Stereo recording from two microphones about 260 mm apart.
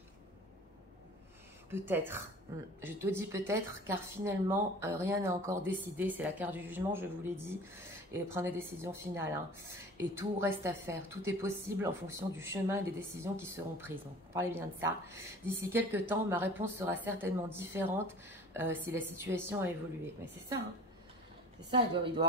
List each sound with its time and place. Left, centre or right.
1.7 s a woman's voice: centre
21.6 s a woman's voice: centre